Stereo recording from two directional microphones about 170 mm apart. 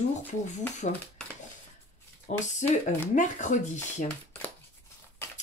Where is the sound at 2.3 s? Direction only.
45° left (ahead or behind).